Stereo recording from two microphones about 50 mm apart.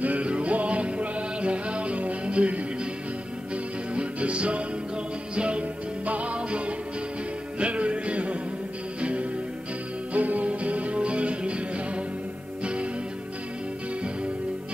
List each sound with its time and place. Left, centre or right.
0.0 s music: right
3.9 s music: right
10.1 s music: right